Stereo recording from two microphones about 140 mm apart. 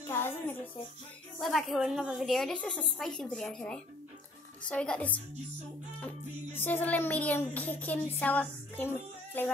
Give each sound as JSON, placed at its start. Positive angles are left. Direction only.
{"t": 0.0, "sound": "a sound", "side_deg": 15}
{"t": 1.4, "sound": "a woman's voice", "side_deg": 0}
{"t": 5.9, "sound": "music", "side_deg": 15}